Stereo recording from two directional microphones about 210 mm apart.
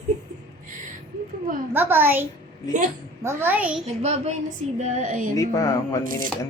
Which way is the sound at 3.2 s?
10° right (ahead or behind).